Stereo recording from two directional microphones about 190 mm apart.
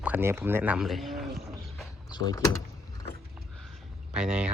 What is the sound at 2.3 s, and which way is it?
Speech, 20° left (ahead or behind).